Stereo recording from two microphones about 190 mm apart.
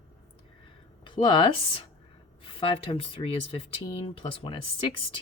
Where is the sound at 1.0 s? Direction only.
25° left (ahead or behind).